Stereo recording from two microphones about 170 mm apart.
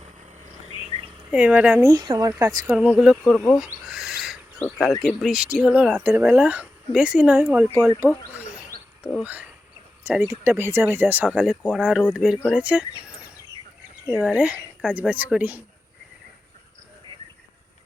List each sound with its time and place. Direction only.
0.7 s bird: 35° right (ahead or behind)
1.3 s a woman's voice: 5° right (ahead or behind)
2.6 s owl: 5° right (ahead or behind)
5.0 s speech: centre (ahead or behind)
8.7 s a sound: 60° right (ahead or behind)
9.2 s speech: 10° right (ahead or behind)
14.1 s speech: 10° right (ahead or behind)